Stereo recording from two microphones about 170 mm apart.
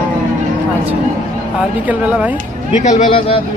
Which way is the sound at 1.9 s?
10° right (ahead or behind).